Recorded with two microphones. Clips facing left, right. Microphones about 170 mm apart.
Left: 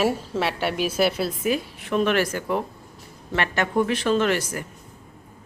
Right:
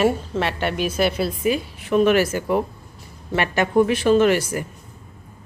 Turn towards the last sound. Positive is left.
turn(degrees=-10)  # may be behind; listen again after turning